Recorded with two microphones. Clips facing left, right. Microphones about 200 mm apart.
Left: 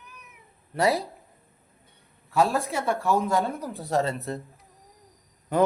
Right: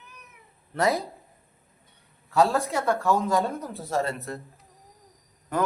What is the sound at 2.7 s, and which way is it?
Speech, 15° left (ahead or behind).